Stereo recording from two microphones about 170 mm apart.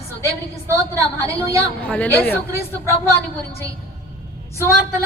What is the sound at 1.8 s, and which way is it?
Speech, 10° left (ahead or behind).